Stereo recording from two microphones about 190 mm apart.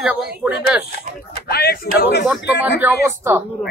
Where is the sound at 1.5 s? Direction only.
55° left (ahead or behind).